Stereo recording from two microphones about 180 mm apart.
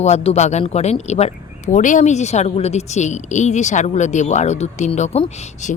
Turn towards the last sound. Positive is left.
turn(degrees=40)  # may be behind; listen again after turning